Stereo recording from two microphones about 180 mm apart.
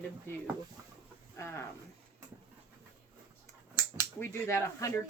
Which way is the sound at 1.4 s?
15° left (ahead or behind).